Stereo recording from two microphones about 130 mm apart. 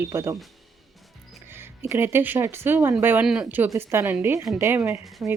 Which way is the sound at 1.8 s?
20° right (ahead or behind).